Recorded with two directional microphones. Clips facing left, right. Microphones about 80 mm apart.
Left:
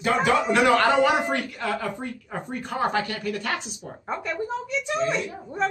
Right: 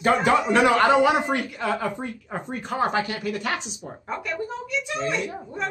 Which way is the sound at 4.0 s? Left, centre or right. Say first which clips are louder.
Left 1 dB; left.